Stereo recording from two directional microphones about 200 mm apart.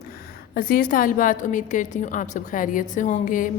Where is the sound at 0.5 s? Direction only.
45° left (ahead or behind).